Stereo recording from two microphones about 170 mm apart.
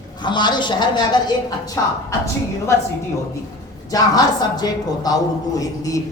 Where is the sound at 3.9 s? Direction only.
25° left (ahead or behind).